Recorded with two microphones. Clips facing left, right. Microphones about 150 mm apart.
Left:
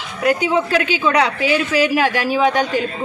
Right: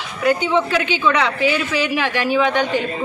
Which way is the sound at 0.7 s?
40° left (ahead or behind).